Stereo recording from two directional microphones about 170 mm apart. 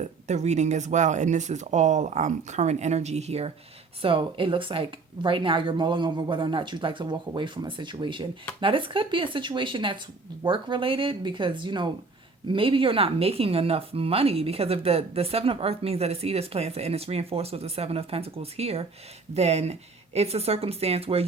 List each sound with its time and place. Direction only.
0.0 s a woman's voice: 40° right (ahead or behind)